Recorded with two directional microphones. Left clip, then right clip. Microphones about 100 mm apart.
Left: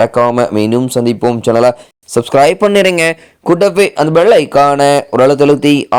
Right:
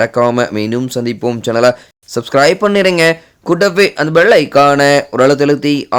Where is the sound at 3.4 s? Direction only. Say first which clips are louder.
Left 1 dB; 30° left (ahead or behind).